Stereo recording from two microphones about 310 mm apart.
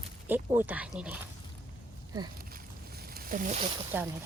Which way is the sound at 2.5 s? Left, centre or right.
Right.